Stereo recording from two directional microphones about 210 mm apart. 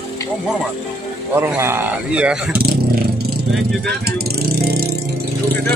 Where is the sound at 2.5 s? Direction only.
45° right (ahead or behind).